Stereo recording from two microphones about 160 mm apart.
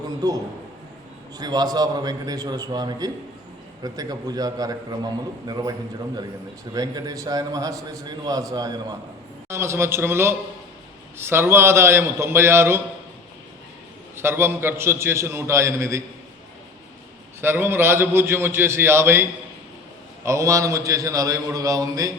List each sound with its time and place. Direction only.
0.2 s a man's voice: 20° right (ahead or behind)
6.7 s a man's voice: 25° right (ahead or behind)
14.2 s a man's voice: 15° right (ahead or behind)
17.4 s a man's voice: 15° right (ahead or behind)